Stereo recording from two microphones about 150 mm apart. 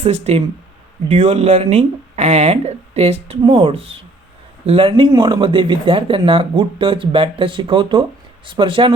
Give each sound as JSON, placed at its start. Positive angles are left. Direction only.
{"t": 0.0, "sound": "speech", "side_deg": -45}